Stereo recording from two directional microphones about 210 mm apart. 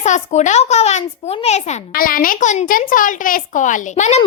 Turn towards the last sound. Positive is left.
turn(degrees=35)  # may be behind; listen again after turning